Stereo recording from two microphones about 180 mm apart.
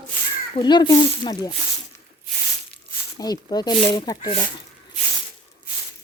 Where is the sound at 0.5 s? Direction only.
25° left (ahead or behind).